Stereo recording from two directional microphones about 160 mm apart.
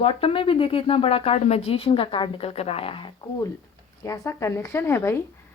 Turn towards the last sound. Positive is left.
turn(degrees=15)  # may be behind; listen again after turning